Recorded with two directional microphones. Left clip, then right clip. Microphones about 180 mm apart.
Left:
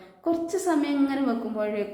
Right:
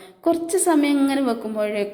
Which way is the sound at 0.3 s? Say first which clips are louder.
Right 6 dB; 35° right (ahead or behind).